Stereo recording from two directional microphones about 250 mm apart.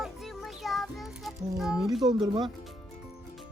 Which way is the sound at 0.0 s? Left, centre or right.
Centre.